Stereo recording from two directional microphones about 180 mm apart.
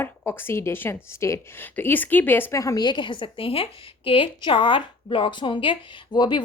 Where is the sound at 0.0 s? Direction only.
10° left (ahead or behind).